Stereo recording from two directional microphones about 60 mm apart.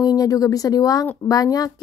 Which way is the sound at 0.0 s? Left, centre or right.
Left.